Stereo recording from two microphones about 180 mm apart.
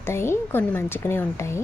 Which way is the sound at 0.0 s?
15° left (ahead or behind).